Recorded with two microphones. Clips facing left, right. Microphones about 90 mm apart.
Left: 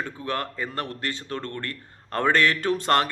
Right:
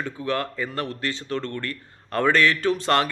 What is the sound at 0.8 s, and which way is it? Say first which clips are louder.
Speech: right 2 dB; 45° left (ahead or behind).